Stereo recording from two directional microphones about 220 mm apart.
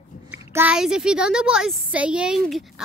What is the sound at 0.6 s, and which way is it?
A woman's voice, 5° right (ahead or behind).